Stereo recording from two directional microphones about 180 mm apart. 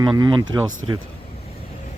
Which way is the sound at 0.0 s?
25° right (ahead or behind).